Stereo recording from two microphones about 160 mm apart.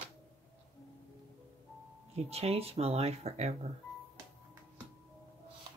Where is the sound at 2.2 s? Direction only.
40° right (ahead or behind).